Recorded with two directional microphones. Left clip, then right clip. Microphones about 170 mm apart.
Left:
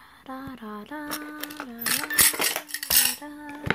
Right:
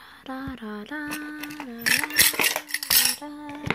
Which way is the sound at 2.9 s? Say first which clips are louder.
Right 2 dB; 10° right (ahead or behind).